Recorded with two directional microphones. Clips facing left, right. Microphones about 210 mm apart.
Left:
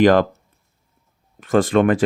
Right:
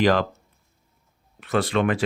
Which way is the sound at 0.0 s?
50° left (ahead or behind).